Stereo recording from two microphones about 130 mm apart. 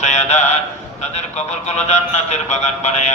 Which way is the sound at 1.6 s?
60° left (ahead or behind).